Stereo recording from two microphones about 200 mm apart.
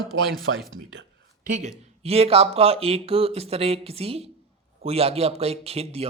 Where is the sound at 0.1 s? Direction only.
65° right (ahead or behind).